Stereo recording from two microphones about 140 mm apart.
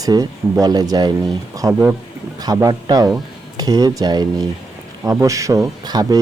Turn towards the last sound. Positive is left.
turn(degrees=-25)  # may be behind; listen again after turning